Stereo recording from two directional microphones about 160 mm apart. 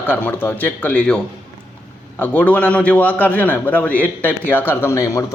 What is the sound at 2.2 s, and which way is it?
A man's voice, 10° left (ahead or behind).